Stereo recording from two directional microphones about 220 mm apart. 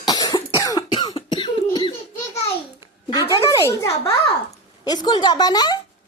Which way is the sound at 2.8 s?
20° left (ahead or behind).